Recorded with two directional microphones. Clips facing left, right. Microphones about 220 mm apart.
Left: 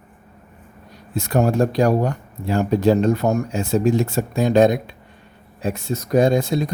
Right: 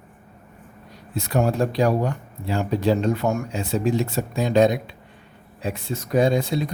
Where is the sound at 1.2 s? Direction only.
45° left (ahead or behind).